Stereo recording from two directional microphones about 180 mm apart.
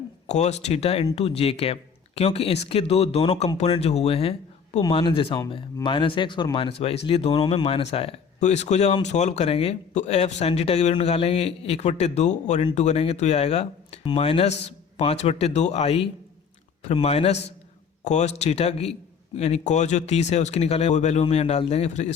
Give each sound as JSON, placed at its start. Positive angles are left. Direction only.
{"t": 0.3, "sound": "speech", "side_deg": 40}